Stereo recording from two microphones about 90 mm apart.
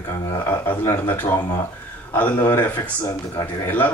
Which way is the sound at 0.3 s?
25° left (ahead or behind).